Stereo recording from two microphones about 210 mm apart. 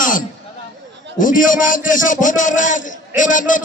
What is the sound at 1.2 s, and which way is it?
A man's voice, 40° left (ahead or behind).